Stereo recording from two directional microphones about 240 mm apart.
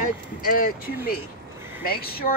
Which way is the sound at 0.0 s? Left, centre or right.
Left.